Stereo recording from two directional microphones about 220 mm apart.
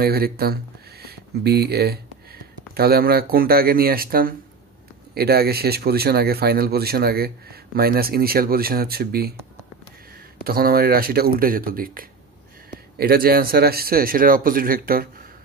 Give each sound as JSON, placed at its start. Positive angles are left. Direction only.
{"t": 0.0, "sound": "speech", "side_deg": -45}
{"t": 10.4, "sound": "speech", "side_deg": -45}